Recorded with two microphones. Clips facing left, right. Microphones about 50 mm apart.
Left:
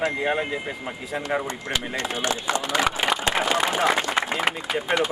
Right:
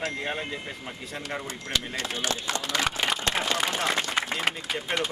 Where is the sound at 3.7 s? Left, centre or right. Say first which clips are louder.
Left 5 dB; centre.